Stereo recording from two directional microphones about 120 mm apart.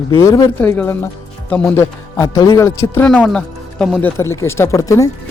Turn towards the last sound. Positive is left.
turn(degrees=25)  # may be behind; listen again after turning